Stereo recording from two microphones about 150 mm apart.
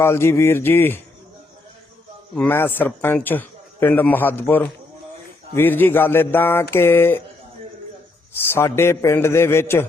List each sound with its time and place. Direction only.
0.0 s a man's voice: 15° left (ahead or behind)
2.3 s a man's voice: 10° left (ahead or behind)
8.3 s a man's voice: 15° left (ahead or behind)